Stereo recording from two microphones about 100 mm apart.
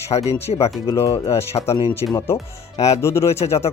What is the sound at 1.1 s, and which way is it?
Speech, 25° left (ahead or behind).